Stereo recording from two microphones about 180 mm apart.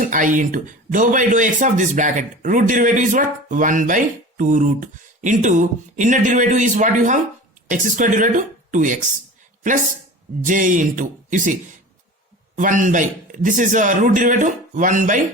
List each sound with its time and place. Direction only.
0.0 s speech: 45° right (ahead or behind)
10.4 s speech: 45° right (ahead or behind)
12.5 s speech: 45° right (ahead or behind)